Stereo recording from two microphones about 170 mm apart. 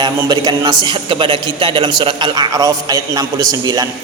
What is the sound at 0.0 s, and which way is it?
A man's voice, 25° right (ahead or behind).